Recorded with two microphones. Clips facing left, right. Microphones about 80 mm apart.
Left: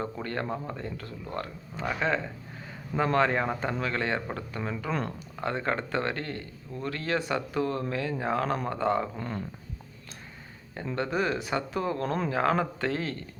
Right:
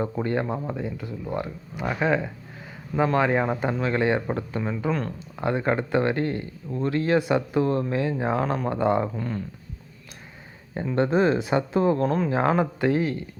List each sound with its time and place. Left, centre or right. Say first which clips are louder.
0.0 s speech: right 7 dB; centre
4.9 s speech: right 4 dB; centre
5.4 s speech: right 6 dB; centre
9.1 s speech: right 5 dB; centre
10.9 s speech: right 8 dB; right
12.0 s speech: right 6 dB; centre
12.3 s speech: right 4 dB; right